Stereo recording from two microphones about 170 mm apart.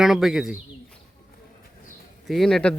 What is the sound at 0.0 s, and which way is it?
Speech, centre (ahead or behind).